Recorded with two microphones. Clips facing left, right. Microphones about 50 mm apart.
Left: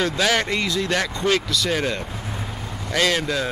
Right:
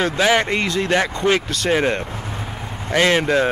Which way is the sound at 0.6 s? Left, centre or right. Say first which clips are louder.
Right 4 dB; right.